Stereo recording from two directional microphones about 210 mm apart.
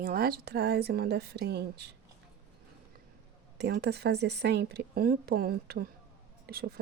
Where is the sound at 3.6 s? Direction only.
50° right (ahead or behind).